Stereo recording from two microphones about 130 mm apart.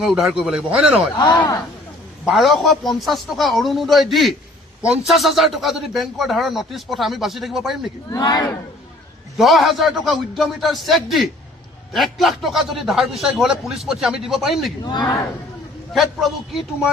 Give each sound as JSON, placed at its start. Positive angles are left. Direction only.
{"t": 0.0, "sound": "a man's voice", "side_deg": 0}
{"t": 1.1, "sound": "speech", "side_deg": 25}
{"t": 2.2, "sound": "a man's voice", "side_deg": 0}
{"t": 8.1, "sound": "speech", "side_deg": 30}
{"t": 9.4, "sound": "a man's voice", "side_deg": 0}
{"t": 14.8, "sound": "speech", "side_deg": 30}
{"t": 15.9, "sound": "a man's voice", "side_deg": 0}